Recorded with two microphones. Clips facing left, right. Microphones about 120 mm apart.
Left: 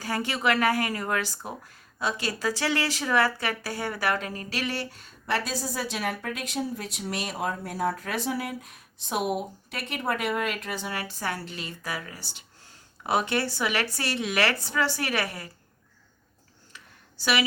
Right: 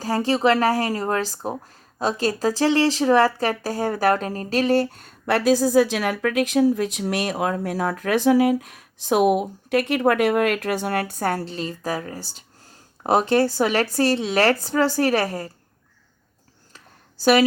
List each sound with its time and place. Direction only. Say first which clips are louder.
0.0 s speech: right 8 dB; 35° right (ahead or behind)
11.4 s speech: right 9 dB; 35° right (ahead or behind)